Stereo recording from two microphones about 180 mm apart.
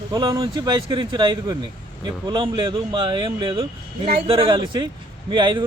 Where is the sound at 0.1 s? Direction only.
25° right (ahead or behind).